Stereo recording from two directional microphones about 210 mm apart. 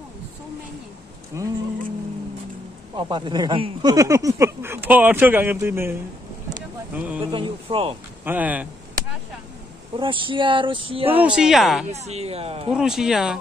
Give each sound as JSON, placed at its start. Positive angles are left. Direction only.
{"t": 1.3, "sound": "speech", "side_deg": -15}
{"t": 2.9, "sound": "speech", "side_deg": -25}
{"t": 7.2, "sound": "speech", "side_deg": -25}
{"t": 8.3, "sound": "speech", "side_deg": -5}
{"t": 9.9, "sound": "speech", "side_deg": -25}
{"t": 11.1, "sound": "speech", "side_deg": -5}
{"t": 11.9, "sound": "speech", "side_deg": -30}
{"t": 12.7, "sound": "speech", "side_deg": 0}